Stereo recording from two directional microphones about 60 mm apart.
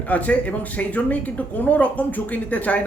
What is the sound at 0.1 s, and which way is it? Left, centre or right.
Speech, left.